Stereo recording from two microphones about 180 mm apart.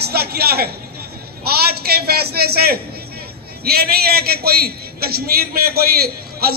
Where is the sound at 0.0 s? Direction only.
60° right (ahead or behind).